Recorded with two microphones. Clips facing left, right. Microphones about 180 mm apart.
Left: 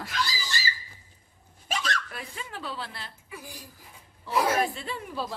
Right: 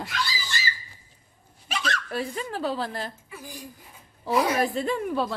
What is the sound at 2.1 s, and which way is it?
A woman's voice, 35° right (ahead or behind).